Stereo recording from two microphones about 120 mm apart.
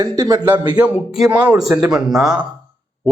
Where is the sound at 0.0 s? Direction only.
35° right (ahead or behind).